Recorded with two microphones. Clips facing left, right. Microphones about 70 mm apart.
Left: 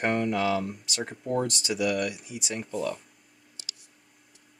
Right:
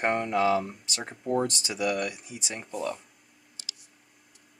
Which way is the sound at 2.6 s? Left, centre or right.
Centre.